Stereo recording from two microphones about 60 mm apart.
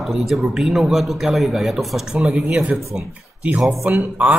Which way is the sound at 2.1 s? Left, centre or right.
Centre.